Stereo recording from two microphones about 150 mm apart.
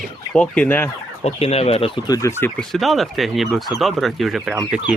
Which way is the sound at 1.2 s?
45° left (ahead or behind).